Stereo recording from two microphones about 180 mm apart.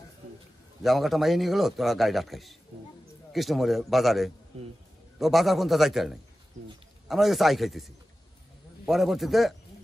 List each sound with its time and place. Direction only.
0.8 s a man's voice: centre (ahead or behind)
4.5 s speech: 35° right (ahead or behind)
5.2 s a man's voice: centre (ahead or behind)